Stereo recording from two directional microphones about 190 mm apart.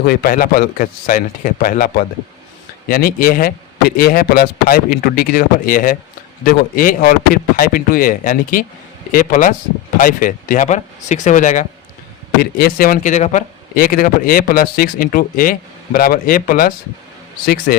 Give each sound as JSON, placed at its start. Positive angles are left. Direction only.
{"t": 0.0, "sound": "speech", "side_deg": 55}
{"t": 12.4, "sound": "speech", "side_deg": 50}